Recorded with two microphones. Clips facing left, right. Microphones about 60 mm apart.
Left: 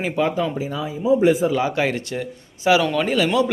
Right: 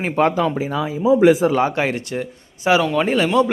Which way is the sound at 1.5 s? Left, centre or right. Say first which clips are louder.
Right 3 dB; right.